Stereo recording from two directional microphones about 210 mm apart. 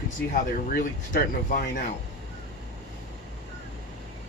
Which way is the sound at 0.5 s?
40° left (ahead or behind).